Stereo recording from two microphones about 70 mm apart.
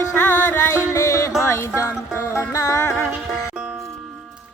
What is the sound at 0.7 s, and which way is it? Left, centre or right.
Music, left.